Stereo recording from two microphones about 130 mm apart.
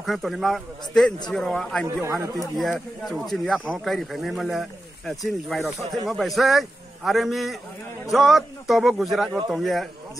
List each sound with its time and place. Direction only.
0.0 s speech: centre (ahead or behind)
2.0 s speech: 20° right (ahead or behind)
3.1 s speech: centre (ahead or behind)